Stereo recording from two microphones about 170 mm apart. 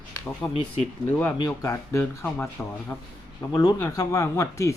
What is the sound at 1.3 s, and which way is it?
Speech, 20° left (ahead or behind).